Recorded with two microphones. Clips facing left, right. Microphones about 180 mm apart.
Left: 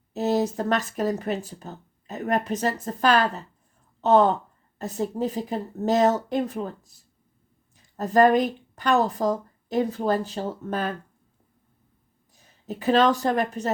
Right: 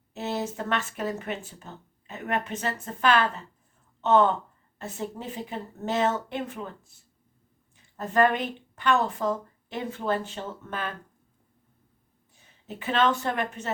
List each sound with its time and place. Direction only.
0.1 s speech: 40° left (ahead or behind)
12.3 s speech: 40° left (ahead or behind)